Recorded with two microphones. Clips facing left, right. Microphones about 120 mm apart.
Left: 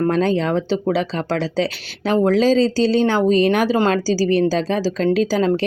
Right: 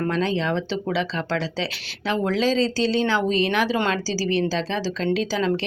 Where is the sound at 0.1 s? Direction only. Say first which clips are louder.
Left 5 dB; 45° left (ahead or behind).